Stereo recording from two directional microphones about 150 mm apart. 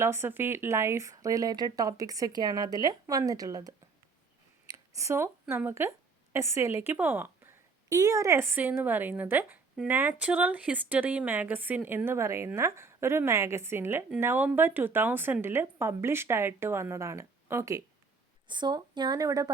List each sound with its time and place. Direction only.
0.0 s speech: 15° right (ahead or behind)
18.4 s speech: 30° right (ahead or behind)